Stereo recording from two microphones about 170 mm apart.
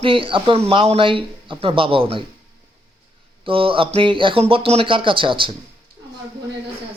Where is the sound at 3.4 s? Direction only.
30° right (ahead or behind).